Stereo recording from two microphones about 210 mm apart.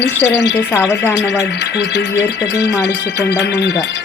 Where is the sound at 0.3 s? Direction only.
55° left (ahead or behind).